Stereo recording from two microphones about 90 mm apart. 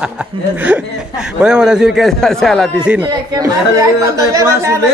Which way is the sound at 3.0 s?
45° right (ahead or behind).